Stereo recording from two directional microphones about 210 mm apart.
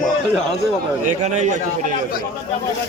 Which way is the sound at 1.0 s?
35° right (ahead or behind).